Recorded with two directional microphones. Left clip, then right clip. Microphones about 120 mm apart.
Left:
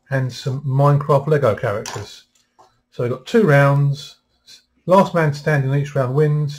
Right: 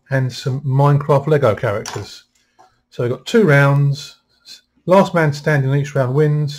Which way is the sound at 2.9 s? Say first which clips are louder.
Right 2 dB; 45° right (ahead or behind).